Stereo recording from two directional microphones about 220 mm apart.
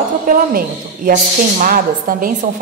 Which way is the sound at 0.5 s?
40° right (ahead or behind).